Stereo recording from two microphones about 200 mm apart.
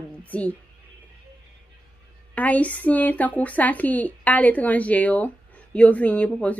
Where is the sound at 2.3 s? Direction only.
5° left (ahead or behind).